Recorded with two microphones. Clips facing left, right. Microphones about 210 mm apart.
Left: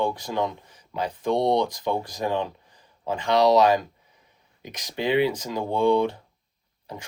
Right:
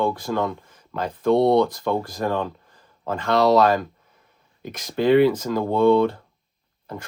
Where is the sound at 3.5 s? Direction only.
50° right (ahead or behind).